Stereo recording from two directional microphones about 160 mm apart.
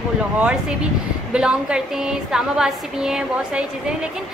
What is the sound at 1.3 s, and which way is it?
A woman's voice, 5° right (ahead or behind).